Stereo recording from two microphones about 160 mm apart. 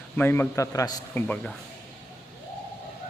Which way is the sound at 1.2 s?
5° left (ahead or behind).